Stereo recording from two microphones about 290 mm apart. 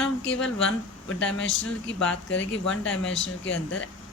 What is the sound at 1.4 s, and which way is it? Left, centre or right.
Speech, left.